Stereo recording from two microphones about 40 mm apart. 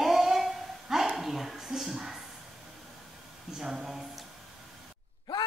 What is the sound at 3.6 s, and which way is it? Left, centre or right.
Speech, centre.